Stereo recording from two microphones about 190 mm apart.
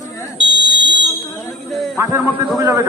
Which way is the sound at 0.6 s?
70° right (ahead or behind).